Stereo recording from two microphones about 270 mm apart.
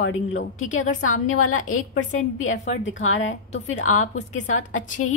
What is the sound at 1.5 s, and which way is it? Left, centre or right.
A woman's voice, left.